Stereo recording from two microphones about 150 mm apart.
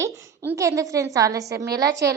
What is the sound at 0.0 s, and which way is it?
A woman's voice, 20° right (ahead or behind).